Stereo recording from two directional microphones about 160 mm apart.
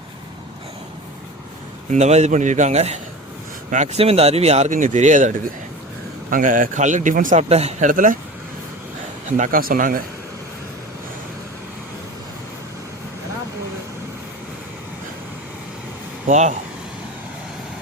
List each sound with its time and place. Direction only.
1.9 s speech: 45° right (ahead or behind)
6.3 s speech: 55° right (ahead or behind)
7.4 s speech: 40° right (ahead or behind); by 8.2 s 55° right (ahead or behind)
9.4 s speech: 65° right (ahead or behind)
16.2 s speech: 50° right (ahead or behind)